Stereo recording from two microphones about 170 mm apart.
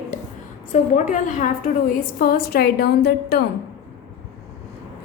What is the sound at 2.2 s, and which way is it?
A woman's voice, 60° left (ahead or behind).